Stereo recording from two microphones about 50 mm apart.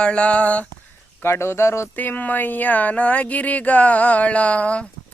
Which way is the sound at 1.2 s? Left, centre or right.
Left.